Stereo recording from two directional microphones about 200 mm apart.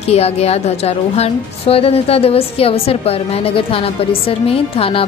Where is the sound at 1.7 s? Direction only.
30° left (ahead or behind).